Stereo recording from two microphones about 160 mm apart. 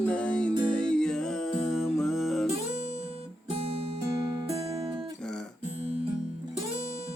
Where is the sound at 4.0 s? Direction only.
20° right (ahead or behind).